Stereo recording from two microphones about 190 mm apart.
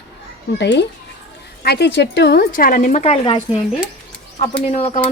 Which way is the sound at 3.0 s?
30° left (ahead or behind).